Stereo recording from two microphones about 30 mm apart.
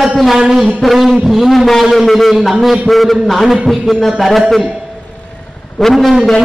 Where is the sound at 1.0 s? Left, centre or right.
Centre.